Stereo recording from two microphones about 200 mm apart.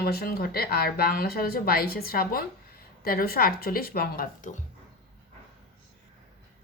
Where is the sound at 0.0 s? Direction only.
50° left (ahead or behind).